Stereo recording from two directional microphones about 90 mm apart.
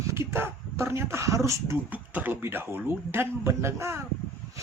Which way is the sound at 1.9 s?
20° right (ahead or behind).